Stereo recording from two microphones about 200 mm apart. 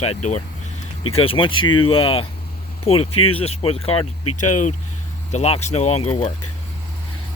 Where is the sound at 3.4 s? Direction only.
30° left (ahead or behind).